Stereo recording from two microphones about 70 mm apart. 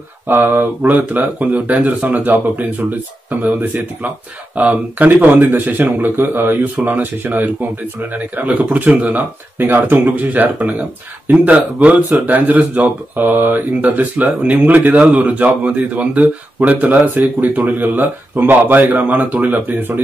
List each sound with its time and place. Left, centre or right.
0.3 s speech: right